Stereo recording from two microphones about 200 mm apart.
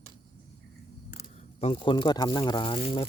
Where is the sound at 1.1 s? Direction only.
30° left (ahead or behind).